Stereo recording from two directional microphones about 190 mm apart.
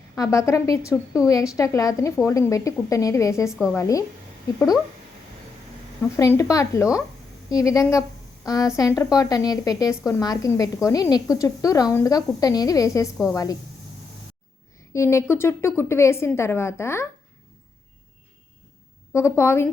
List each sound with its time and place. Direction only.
0.2 s speech: 15° left (ahead or behind)
3.5 s a woman's voice: 5° right (ahead or behind)
3.8 s speech: 15° left (ahead or behind)
6.1 s a woman's voice: 15° left (ahead or behind)
14.9 s speech: 15° left (ahead or behind)
19.1 s speech: 15° left (ahead or behind)